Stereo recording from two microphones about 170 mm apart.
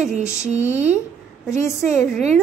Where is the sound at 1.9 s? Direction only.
5° left (ahead or behind).